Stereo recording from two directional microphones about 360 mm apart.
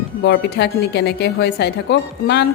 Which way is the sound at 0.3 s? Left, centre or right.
Left.